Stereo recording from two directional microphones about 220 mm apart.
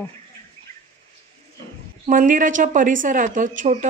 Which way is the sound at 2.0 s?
35° right (ahead or behind).